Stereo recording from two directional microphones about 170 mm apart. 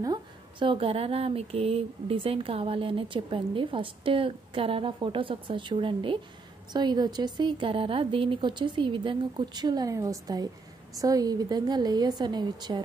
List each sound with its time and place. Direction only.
0.0 s a woman's voice: 25° right (ahead or behind)